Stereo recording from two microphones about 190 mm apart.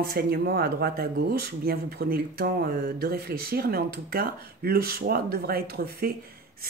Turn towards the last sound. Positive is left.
turn(degrees=-55)  # may be behind; listen again after turning